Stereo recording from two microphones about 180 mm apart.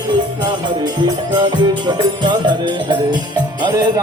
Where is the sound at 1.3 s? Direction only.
25° right (ahead or behind).